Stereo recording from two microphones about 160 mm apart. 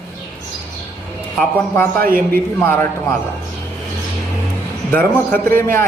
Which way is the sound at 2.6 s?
15° left (ahead or behind).